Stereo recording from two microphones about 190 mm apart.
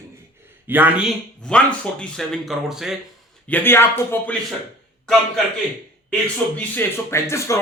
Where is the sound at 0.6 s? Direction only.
10° right (ahead or behind).